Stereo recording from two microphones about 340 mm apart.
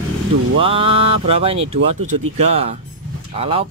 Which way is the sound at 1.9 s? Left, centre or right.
Right.